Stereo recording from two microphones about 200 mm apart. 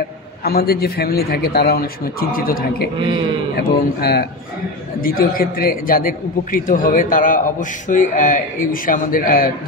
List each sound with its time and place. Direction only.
0.4 s speech: 50° left (ahead or behind)